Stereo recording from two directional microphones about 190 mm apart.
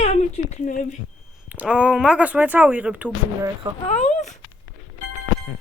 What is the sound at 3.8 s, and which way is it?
Speech, 35° left (ahead or behind).